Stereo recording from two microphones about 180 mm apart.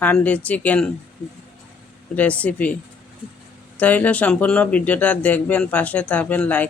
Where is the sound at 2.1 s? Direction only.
10° left (ahead or behind).